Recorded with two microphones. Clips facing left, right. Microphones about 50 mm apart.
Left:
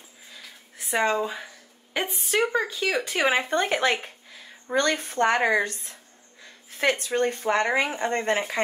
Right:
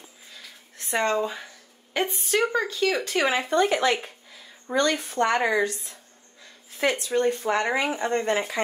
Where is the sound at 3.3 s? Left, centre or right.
Left.